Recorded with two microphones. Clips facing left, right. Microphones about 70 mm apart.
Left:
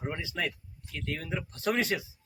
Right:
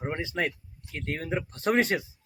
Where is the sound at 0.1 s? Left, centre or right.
Right.